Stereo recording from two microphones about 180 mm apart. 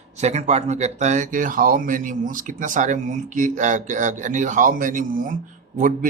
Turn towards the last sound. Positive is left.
turn(degrees=-45)  # may be behind; listen again after turning